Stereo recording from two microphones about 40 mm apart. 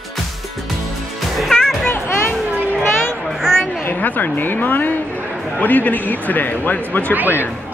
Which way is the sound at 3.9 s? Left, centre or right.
Left.